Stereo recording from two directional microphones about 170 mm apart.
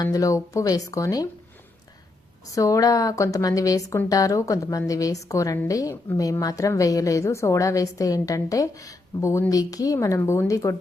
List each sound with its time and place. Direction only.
0.0 s speech: 20° left (ahead or behind)
2.6 s speech: 20° left (ahead or behind)